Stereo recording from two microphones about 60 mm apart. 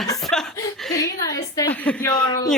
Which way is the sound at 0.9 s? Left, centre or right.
Left.